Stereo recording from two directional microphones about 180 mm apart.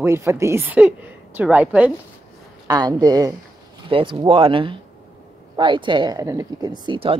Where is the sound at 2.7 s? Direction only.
20° right (ahead or behind).